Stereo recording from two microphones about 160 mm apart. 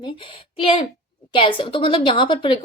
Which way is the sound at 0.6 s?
35° left (ahead or behind).